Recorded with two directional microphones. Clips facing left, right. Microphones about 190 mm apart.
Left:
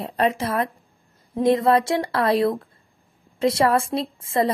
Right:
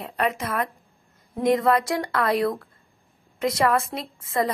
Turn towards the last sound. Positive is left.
turn(degrees=30)  # may be behind; listen again after turning